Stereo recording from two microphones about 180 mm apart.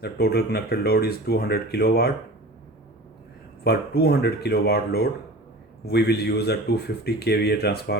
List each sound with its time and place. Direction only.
0.0 s speech: 65° left (ahead or behind)
3.6 s speech: 65° left (ahead or behind)